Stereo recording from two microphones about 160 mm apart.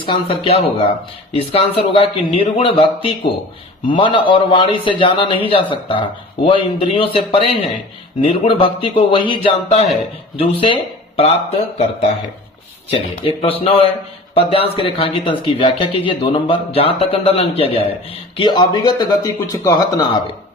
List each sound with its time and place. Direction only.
0.0 s speech: 35° left (ahead or behind)
12.9 s speech: 35° left (ahead or behind)